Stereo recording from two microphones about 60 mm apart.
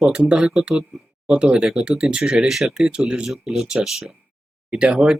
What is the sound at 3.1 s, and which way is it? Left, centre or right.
Speech, centre.